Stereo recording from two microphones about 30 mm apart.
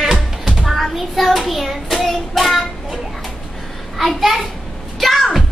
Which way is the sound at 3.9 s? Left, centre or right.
Centre.